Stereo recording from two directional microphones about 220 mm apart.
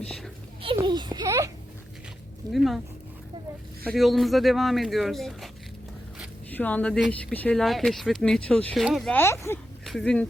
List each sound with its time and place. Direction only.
0.0 s speech: centre (ahead or behind)
0.6 s a sound: 25° right (ahead or behind)
2.5 s speech: centre (ahead or behind)
3.8 s speech: centre (ahead or behind)
6.5 s speech: 5° left (ahead or behind)